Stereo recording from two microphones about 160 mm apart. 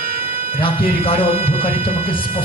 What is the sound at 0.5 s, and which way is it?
Speech, 35° left (ahead or behind).